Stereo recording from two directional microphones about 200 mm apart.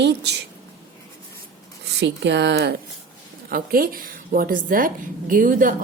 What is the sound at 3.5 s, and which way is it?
A woman's voice, 45° right (ahead or behind).